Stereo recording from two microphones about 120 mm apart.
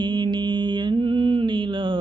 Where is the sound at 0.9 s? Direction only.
45° right (ahead or behind).